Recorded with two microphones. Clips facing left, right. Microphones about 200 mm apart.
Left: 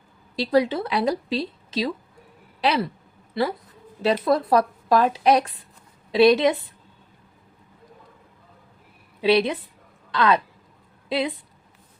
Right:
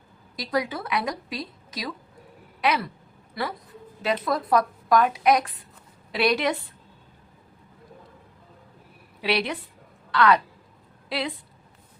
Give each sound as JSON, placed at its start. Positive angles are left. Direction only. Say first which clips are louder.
{"t": 0.3, "sound": "a woman's voice", "louder": "left 7 dB", "side_deg": 30}
{"t": 9.2, "sound": "a woman's voice", "louder": "left 7 dB", "side_deg": 20}